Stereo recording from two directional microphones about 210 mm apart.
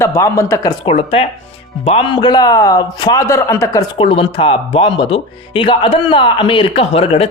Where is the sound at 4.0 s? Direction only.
25° left (ahead or behind).